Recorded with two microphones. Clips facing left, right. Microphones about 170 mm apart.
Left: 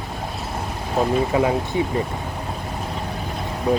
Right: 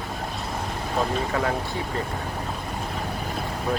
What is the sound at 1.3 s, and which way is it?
Speech, 15° left (ahead or behind).